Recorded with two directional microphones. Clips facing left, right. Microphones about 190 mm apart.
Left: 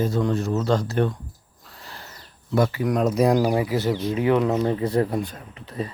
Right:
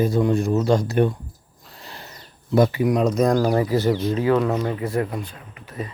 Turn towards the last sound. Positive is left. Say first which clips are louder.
# left 2 dB
turn(degrees=30)  # may be behind; listen again after turning